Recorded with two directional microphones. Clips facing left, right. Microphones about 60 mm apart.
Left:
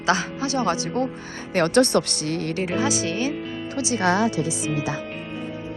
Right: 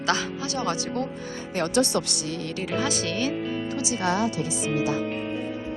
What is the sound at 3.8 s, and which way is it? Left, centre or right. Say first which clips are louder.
Speech: left 3 dB; left.